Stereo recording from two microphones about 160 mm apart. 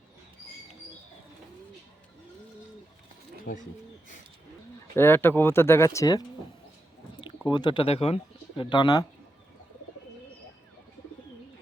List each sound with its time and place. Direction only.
3.5 s speech: 60° left (ahead or behind)
4.9 s speech: 15° left (ahead or behind)